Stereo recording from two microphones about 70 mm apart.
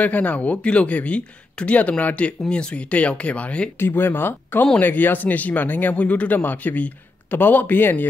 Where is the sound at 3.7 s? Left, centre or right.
Left.